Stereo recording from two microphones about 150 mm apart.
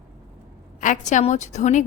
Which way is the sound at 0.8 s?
55° left (ahead or behind).